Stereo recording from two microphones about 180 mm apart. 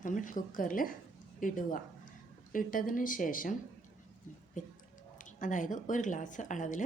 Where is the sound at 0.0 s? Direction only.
45° left (ahead or behind).